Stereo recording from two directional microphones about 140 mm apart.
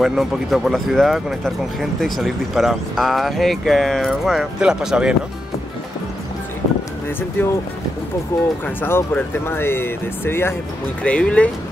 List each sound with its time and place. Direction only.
0.0 s speech: centre (ahead or behind)
8.3 s speech: 20° left (ahead or behind)